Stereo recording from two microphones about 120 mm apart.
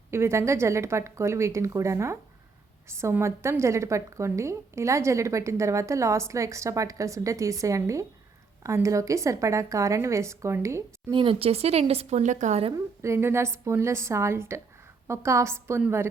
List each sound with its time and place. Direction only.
0.1 s a woman's voice: 20° right (ahead or behind)
11.1 s speech: 45° right (ahead or behind); by 12.6 s 80° right
12.7 s a woman's voice: 25° right (ahead or behind)